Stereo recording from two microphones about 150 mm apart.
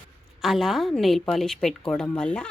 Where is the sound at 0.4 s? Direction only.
Centre (ahead or behind).